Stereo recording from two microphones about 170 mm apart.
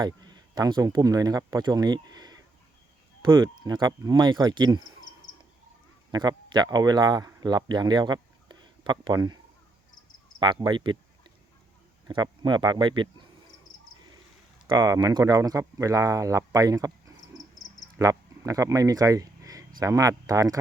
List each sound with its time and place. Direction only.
0.0 s speech: 25° right (ahead or behind)
6.1 s speech: 25° right (ahead or behind)
10.4 s speech: 25° right (ahead or behind)
14.7 s speech: 25° right (ahead or behind)
17.3 s a sound: 20° left (ahead or behind)
17.9 s a sound: 20° right (ahead or behind)
19.8 s speech: 20° right (ahead or behind)